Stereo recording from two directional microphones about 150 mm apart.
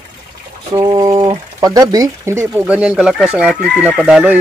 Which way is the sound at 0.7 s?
25° right (ahead or behind).